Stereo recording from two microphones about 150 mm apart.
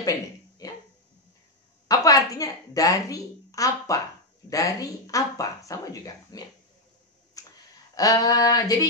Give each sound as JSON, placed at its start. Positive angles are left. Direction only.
{"t": 0.6, "sound": "a sound", "side_deg": 25}
{"t": 1.9, "sound": "a woman's voice", "side_deg": 25}
{"t": 7.4, "sound": "clicking", "side_deg": 25}
{"t": 7.9, "sound": "speech", "side_deg": 25}